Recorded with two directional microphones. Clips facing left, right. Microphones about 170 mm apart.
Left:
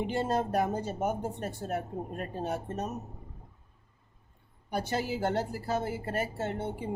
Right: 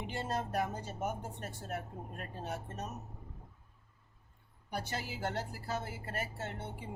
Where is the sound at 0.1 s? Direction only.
30° left (ahead or behind).